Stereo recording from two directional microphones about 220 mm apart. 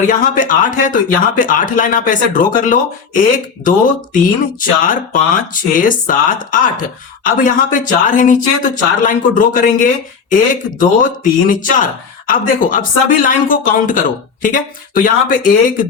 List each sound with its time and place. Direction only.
0.1 s speech: 35° left (ahead or behind)